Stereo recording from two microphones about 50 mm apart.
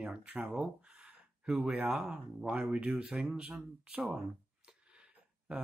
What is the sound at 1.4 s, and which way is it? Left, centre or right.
A man's voice, centre.